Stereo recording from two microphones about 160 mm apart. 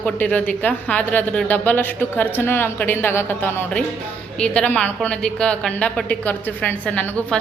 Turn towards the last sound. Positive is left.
turn(degrees=5)  # may be behind; listen again after turning